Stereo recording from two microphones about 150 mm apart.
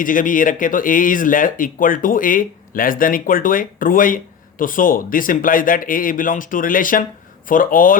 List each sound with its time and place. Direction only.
0.0 s speech: 65° left (ahead or behind)